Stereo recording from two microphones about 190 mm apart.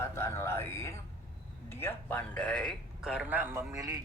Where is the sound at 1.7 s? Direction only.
10° left (ahead or behind).